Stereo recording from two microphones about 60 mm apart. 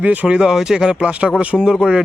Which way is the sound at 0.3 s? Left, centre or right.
Centre.